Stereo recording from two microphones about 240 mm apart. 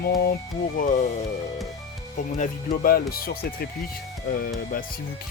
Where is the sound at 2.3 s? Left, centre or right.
Left.